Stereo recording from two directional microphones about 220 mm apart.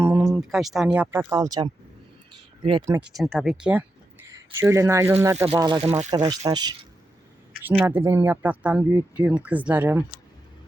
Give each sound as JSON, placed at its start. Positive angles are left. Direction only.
{"t": 0.0, "sound": "a sound", "side_deg": -10}
{"t": 0.3, "sound": "speech", "side_deg": 0}
{"t": 1.3, "sound": "speech", "side_deg": -15}
{"t": 3.2, "sound": "speech", "side_deg": 0}
{"t": 7.7, "sound": "speech", "side_deg": -10}